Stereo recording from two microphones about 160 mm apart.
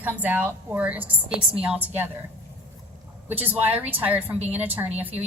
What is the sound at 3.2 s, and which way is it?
A woman's voice, 10° right (ahead or behind).